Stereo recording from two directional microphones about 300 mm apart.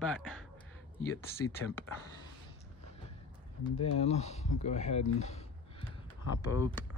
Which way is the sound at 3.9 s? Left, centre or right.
Left.